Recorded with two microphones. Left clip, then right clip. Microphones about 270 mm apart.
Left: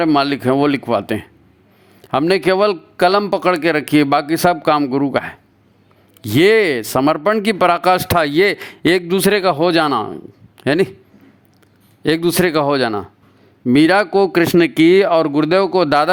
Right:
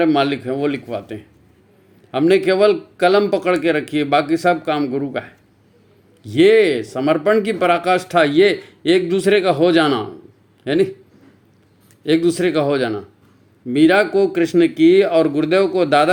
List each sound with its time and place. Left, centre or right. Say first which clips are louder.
0.0 s a man's voice: left 2 dB; left
12.0 s speech: left 1 dB; left